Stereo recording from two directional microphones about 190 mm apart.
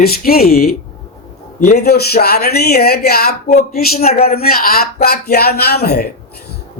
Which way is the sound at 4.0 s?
35° left (ahead or behind).